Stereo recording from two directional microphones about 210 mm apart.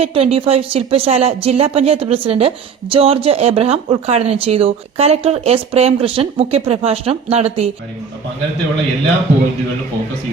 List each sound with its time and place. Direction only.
0.0 s speech: 25° right (ahead or behind)